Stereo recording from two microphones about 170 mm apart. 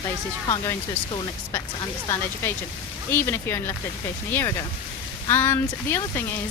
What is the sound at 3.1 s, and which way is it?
Speech, 15° left (ahead or behind).